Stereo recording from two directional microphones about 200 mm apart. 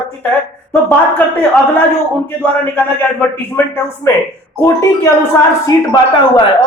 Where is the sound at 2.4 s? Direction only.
10° left (ahead or behind).